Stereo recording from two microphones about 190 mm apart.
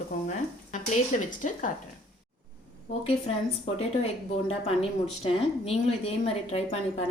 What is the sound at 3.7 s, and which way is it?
Speech, 35° left (ahead or behind).